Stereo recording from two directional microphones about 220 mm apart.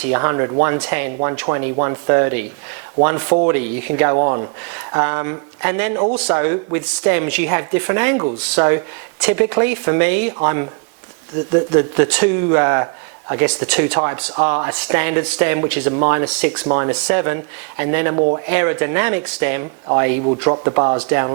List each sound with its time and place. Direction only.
0.0 s a man's voice: 15° right (ahead or behind)
18.2 s speech: 30° right (ahead or behind)
18.4 s a man's voice: 15° right (ahead or behind)
21.0 s a man's voice: 15° right (ahead or behind)